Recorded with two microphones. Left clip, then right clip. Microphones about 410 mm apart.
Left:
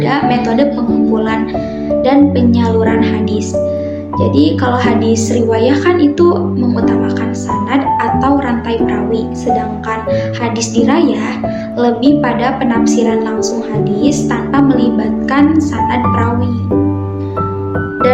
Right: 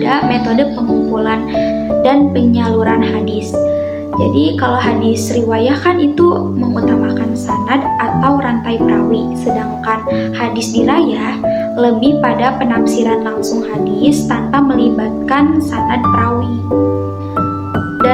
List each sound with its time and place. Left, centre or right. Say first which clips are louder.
0.0 s speech: even; right
1.1 s music: even; right
2.0 s speech: left 2 dB; right
4.2 s speech: left 1 dB; right
7.7 s speech: left 2 dB; right
11.8 s speech: left 2 dB; right
14.0 s speech: right 2 dB; right